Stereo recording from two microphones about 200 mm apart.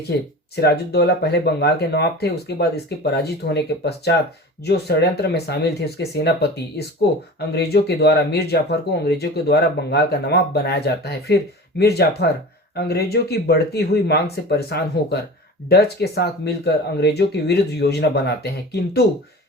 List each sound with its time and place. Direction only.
0.1 s speech: 55° left (ahead or behind)